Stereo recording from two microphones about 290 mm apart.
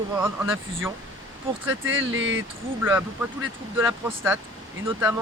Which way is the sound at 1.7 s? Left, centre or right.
Right.